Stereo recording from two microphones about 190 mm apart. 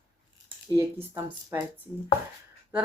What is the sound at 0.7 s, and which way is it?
Speech, 15° right (ahead or behind).